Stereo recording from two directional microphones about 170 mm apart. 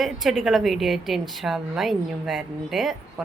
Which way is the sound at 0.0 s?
Centre (ahead or behind).